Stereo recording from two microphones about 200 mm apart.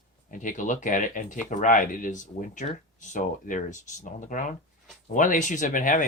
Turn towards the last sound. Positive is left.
turn(degrees=40)  # may be behind; listen again after turning